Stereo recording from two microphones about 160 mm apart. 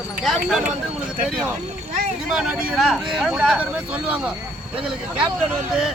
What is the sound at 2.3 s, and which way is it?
Speech, 5° right (ahead or behind).